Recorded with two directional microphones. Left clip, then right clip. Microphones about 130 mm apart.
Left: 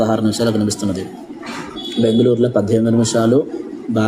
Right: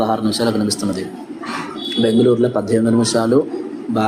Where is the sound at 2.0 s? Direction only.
40° left (ahead or behind).